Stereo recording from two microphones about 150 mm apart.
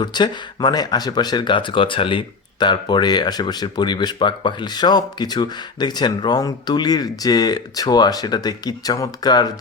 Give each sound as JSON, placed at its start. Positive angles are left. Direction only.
{"t": 0.0, "sound": "speech", "side_deg": 30}